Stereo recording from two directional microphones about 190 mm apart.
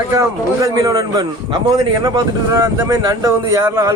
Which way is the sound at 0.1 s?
15° right (ahead or behind).